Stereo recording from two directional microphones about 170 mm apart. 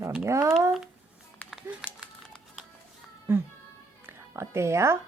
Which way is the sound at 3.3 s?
15° right (ahead or behind).